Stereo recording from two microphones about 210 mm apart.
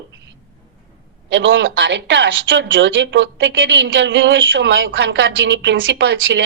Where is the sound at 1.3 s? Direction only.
60° right (ahead or behind).